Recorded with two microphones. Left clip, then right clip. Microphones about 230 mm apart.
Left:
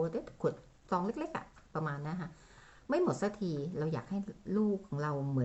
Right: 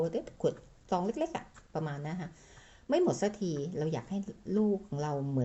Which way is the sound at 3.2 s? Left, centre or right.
Left.